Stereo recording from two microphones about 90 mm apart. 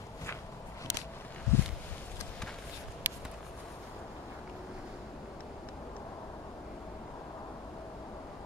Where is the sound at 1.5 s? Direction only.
30° left (ahead or behind).